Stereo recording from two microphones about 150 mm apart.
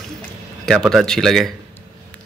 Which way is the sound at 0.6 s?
5° left (ahead or behind).